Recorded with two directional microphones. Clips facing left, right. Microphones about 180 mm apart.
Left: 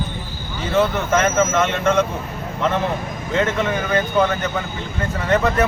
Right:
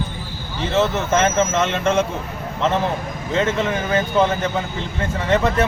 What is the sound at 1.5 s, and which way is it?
Speech, 25° right (ahead or behind).